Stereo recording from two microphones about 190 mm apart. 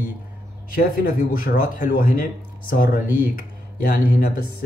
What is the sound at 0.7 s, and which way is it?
Speech, 50° left (ahead or behind).